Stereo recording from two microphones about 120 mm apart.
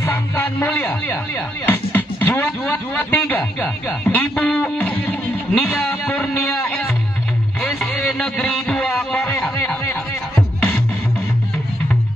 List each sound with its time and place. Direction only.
0.0 s speech: 20° left (ahead or behind)
5.7 s music: 10° left (ahead or behind)
8.1 s a man's voice: 5° left (ahead or behind)